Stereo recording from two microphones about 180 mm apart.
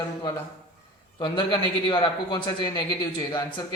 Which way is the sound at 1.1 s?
25° left (ahead or behind).